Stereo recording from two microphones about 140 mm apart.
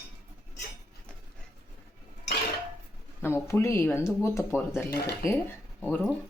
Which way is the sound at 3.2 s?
20° left (ahead or behind).